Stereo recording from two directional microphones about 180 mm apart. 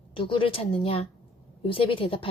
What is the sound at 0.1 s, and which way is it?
A woman's voice, 30° left (ahead or behind).